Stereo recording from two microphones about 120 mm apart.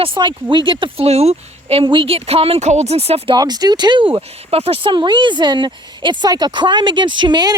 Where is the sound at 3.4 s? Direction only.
35° right (ahead or behind); by 4.9 s 55° right (ahead or behind).